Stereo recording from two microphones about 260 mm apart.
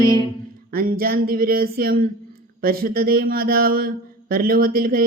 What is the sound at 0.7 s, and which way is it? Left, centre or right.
Speech, right.